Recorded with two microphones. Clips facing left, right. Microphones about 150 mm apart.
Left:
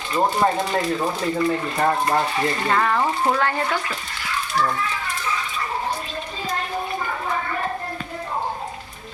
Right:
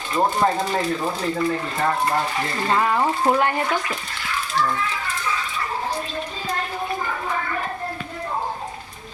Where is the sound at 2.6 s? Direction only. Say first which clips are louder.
Right 3 dB; 15° right (ahead or behind).